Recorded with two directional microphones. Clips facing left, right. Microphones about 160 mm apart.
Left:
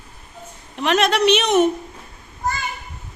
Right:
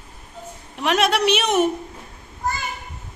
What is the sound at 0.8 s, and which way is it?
Speech, 10° right (ahead or behind).